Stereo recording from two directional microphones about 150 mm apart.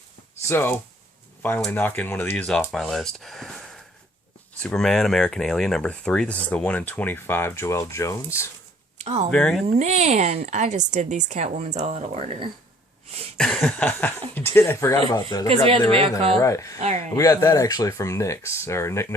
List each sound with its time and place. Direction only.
0.4 s speech: 15° left (ahead or behind)
9.0 s speech: 45° right (ahead or behind)
9.3 s speech: 5° left (ahead or behind)
9.6 s a woman's voice: 50° right (ahead or behind)
13.3 s speech: 5° left (ahead or behind); by 15.4 s 20° left (ahead or behind)
15.4 s speech: 40° right (ahead or behind)
16.4 s speech: 20° left (ahead or behind)
16.7 s a woman's voice: 45° right (ahead or behind)
17.1 s speech: 20° left (ahead or behind)